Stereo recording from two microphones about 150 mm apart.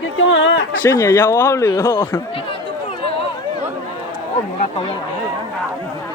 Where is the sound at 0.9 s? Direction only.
15° left (ahead or behind).